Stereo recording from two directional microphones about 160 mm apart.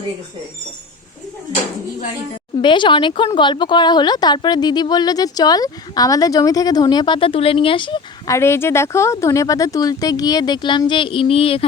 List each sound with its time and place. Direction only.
2.6 s speech: 30° left (ahead or behind)
8.3 s speech: 15° left (ahead or behind); by 11.6 s 35° left (ahead or behind)